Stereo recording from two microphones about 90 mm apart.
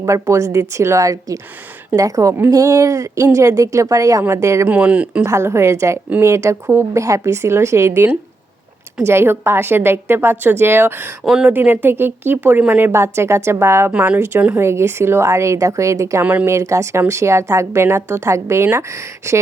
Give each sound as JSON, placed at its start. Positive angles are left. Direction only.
{"t": 0.0, "sound": "a woman's voice", "side_deg": -35}
{"t": 4.6, "sound": "speech", "side_deg": -15}
{"t": 5.2, "sound": "a woman's voice", "side_deg": -30}
{"t": 11.2, "sound": "speech", "side_deg": -5}
{"t": 11.4, "sound": "speech", "side_deg": -20}
{"t": 13.9, "sound": "a woman's voice", "side_deg": -15}
{"t": 16.2, "sound": "speech", "side_deg": -15}
{"t": 16.5, "sound": "a woman's voice", "side_deg": -35}